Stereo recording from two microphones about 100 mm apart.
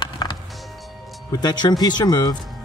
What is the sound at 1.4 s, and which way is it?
Speech, 45° left (ahead or behind).